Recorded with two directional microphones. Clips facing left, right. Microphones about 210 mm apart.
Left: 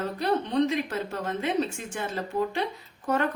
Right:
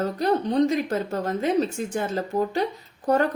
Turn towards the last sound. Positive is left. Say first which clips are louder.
# right 5 dB
turn(degrees=-35)  # may be behind; listen again after turning